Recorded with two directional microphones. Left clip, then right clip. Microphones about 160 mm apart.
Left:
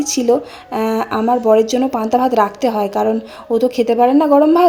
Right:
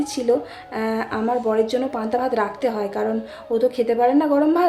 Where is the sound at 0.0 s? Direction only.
40° left (ahead or behind).